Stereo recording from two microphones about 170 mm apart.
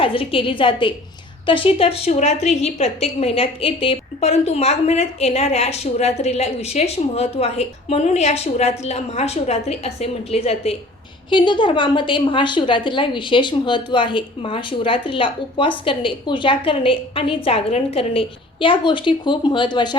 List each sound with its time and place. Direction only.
0.0 s a woman's voice: 30° left (ahead or behind)